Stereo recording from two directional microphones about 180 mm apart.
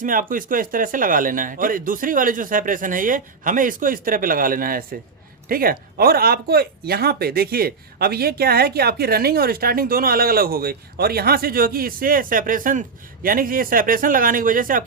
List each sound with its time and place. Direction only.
0.0 s speech: 50° right (ahead or behind)